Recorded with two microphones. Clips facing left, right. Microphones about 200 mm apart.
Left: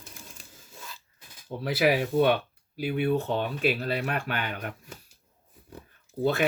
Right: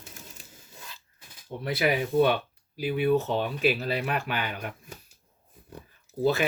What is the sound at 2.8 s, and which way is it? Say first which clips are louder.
Speech: right 1 dB; 50° left (ahead or behind).